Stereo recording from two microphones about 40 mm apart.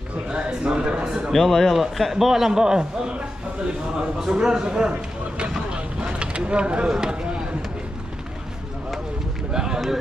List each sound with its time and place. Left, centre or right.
0.3 s speech: right
1.3 s speech: centre
1.8 s a man's voice: centre; by 3.2 s right
4.2 s a man's voice: centre
5.7 s vehicle: right
6.9 s speech: centre
9.5 s a sound: centre